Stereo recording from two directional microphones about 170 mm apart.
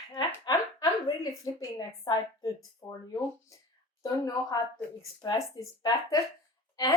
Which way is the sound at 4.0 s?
20° left (ahead or behind).